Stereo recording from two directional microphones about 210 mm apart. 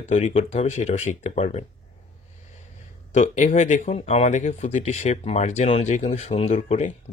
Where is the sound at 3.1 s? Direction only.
35° left (ahead or behind).